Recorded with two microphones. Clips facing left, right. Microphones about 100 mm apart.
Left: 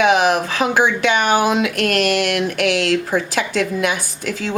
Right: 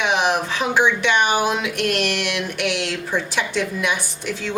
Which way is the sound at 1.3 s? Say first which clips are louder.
Left 4 dB; 90° left.